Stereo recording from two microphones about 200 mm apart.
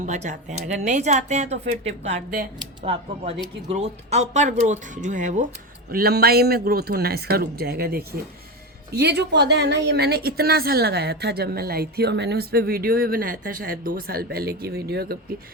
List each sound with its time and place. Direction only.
0.0 s speech: 35° right (ahead or behind)
5.9 s a woman's voice: 50° right (ahead or behind)